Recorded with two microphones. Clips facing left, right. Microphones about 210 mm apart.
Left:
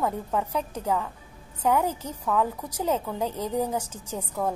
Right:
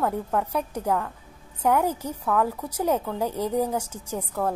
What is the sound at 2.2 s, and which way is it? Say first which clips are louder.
Speech: right 1 dB; 10° left (ahead or behind).